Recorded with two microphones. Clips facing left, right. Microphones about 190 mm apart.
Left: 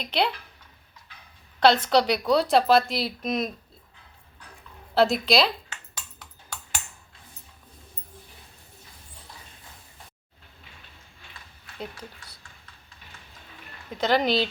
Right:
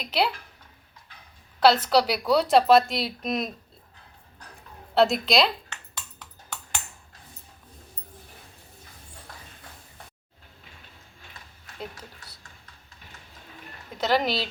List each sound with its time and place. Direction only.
0.0 s speech: 5° right (ahead or behind)
1.5 s speech: 5° right (ahead or behind)
4.9 s speech: centre (ahead or behind)
11.2 s a sound: 40° right (ahead or behind)
13.9 s speech: centre (ahead or behind)